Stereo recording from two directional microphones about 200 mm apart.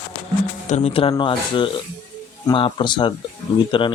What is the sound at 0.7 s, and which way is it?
Speech, 30° left (ahead or behind).